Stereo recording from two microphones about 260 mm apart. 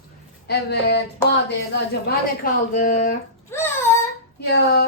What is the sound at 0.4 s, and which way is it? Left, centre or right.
A woman's voice, left.